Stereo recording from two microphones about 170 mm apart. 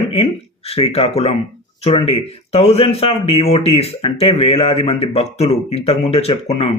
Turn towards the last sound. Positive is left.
turn(degrees=40)  # may be behind; listen again after turning